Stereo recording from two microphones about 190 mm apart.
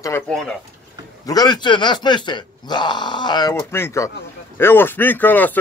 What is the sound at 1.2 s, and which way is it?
A man's voice, 20° left (ahead or behind).